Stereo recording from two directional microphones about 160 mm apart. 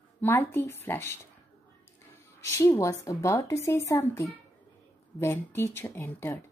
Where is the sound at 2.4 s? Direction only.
20° left (ahead or behind).